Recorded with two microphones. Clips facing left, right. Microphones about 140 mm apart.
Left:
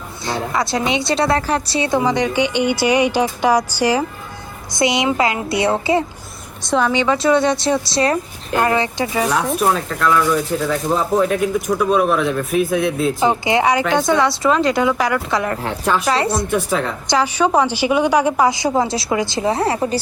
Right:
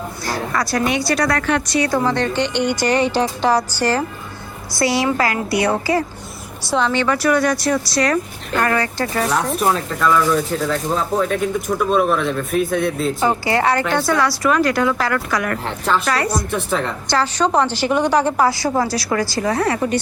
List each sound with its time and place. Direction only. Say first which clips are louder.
0.3 s speech: left 2 dB; 25° left (ahead or behind)
2.0 s a woman's voice: left 2 dB; 15° left (ahead or behind)
9.1 s a woman's voice: left 1 dB; 10° left (ahead or behind)
9.6 s speech: left 1 dB; centre (ahead or behind)
13.2 s speech: left 1 dB; 20° left (ahead or behind)
15.6 s a woman's voice: left 1 dB; 10° left (ahead or behind)
16.3 s speech: left 2 dB; centre (ahead or behind)
17.1 s a woman's voice: left 2 dB; 10° left (ahead or behind); by 20.0 s 30° left (ahead or behind)